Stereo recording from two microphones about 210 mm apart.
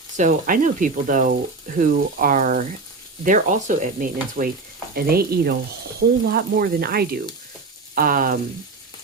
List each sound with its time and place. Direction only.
0.2 s speech: 40° right (ahead or behind)